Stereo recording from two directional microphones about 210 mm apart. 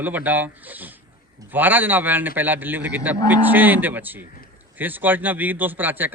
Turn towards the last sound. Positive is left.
turn(degrees=-10)  # may be behind; listen again after turning